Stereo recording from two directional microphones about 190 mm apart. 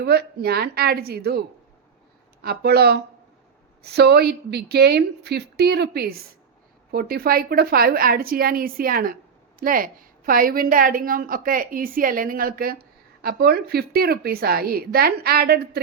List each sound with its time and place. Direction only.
0.0 s a woman's voice: 60° right (ahead or behind)
2.4 s a woman's voice: 55° right (ahead or behind)